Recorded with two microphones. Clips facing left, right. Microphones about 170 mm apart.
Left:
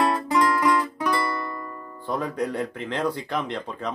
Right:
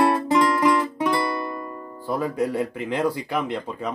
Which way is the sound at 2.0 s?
5° right (ahead or behind).